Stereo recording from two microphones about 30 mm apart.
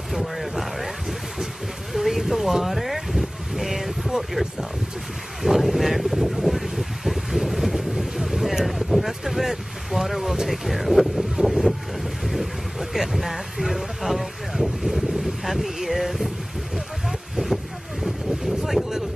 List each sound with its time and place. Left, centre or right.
0.1 s boat: centre
1.9 s vehicle: centre
4.2 s speech: centre
5.4 s a sound: centre
8.6 s boat: centre
10.5 s speech: centre
11.5 s boat: centre
17.4 s vehicle: right
18.0 s boat: centre